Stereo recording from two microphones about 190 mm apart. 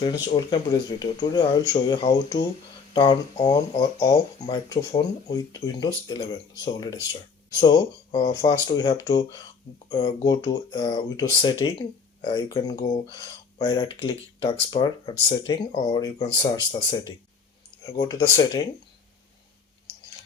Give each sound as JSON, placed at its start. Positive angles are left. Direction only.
{"t": 0.0, "sound": "speech", "side_deg": 20}
{"t": 17.8, "sound": "speech", "side_deg": 20}